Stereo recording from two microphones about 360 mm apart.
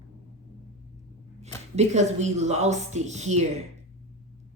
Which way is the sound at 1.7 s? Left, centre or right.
Centre.